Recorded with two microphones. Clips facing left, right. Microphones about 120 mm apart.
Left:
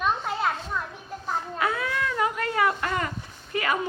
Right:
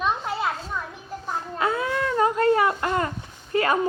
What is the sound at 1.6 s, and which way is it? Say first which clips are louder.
A woman's voice: right 4 dB; 25° right (ahead or behind).